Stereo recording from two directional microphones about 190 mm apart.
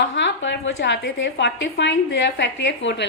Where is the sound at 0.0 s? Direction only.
70° left (ahead or behind).